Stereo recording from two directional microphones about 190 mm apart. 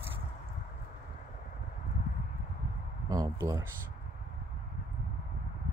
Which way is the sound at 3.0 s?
20° right (ahead or behind).